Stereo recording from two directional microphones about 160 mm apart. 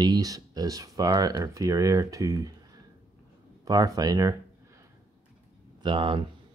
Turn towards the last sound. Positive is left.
turn(degrees=-30)  # may be behind; listen again after turning